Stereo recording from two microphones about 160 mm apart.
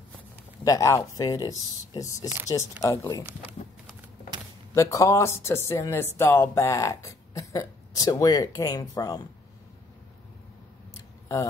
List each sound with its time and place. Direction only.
0.7 s speech: 20° left (ahead or behind)
4.7 s speech: 20° left (ahead or behind)